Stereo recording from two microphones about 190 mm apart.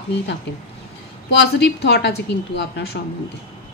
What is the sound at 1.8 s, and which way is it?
A woman's voice, 60° left (ahead or behind).